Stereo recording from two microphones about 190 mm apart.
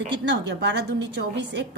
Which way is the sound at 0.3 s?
65° right (ahead or behind).